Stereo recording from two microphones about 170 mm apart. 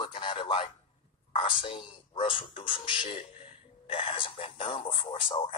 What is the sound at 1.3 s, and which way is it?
Speech, 30° left (ahead or behind).